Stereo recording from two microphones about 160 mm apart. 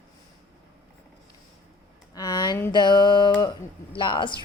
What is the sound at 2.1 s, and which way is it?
A woman's voice, 25° left (ahead or behind).